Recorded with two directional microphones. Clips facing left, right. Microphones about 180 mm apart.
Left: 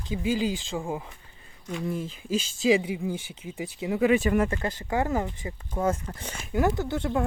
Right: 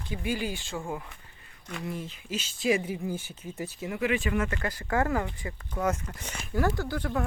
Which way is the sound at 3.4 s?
15° left (ahead or behind).